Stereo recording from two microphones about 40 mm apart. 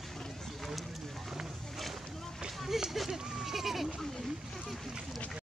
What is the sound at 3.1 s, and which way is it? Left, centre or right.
Sheep, centre.